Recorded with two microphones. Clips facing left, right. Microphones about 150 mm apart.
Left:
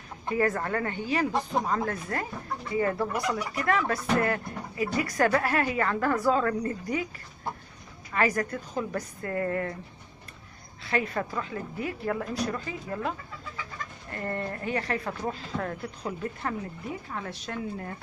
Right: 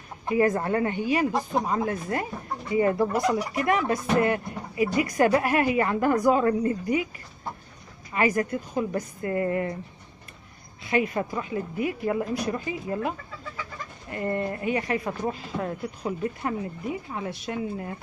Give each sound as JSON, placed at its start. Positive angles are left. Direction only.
{"t": 0.3, "sound": "a woman's voice", "side_deg": -20}
{"t": 8.1, "sound": "a woman's voice", "side_deg": -15}
{"t": 10.8, "sound": "a woman's voice", "side_deg": -15}
{"t": 14.1, "sound": "a woman's voice", "side_deg": -15}